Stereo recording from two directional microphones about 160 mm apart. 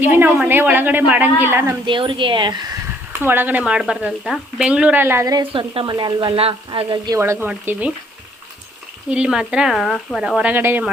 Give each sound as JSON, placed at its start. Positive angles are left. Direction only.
{"t": 0.0, "sound": "speech", "side_deg": -10}
{"t": 1.9, "sound": "speech", "side_deg": -30}
{"t": 3.1, "sound": "speech", "side_deg": -15}
{"t": 7.2, "sound": "speech", "side_deg": -15}
{"t": 9.0, "sound": "speech", "side_deg": -5}